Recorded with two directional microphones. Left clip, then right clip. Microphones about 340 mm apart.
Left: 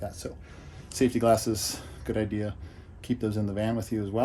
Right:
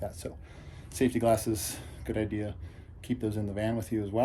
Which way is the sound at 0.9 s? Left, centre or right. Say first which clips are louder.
Left 3 dB; centre.